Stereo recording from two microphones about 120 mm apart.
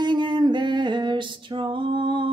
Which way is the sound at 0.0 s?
40° right (ahead or behind).